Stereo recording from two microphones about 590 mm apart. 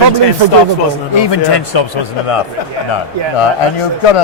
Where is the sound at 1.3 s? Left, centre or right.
Left.